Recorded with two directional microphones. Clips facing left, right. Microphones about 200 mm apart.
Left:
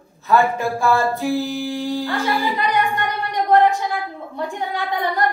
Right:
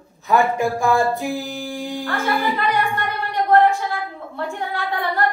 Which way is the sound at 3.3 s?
15° left (ahead or behind).